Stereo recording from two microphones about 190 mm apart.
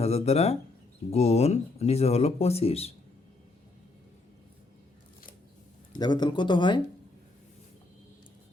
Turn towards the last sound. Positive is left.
turn(degrees=25)  # may be behind; listen again after turning